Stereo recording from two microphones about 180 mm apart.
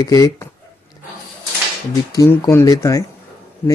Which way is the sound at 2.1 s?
20° left (ahead or behind).